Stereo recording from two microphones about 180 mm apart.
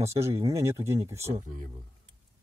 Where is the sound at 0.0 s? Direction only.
15° right (ahead or behind).